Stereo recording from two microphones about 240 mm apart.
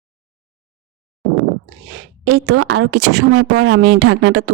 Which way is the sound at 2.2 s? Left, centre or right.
Right.